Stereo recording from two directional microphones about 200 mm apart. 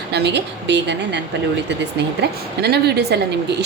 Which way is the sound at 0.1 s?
55° right (ahead or behind).